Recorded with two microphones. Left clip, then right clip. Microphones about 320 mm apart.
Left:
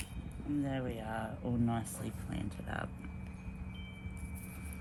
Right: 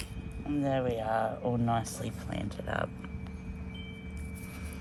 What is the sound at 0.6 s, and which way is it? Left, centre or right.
Speech, right.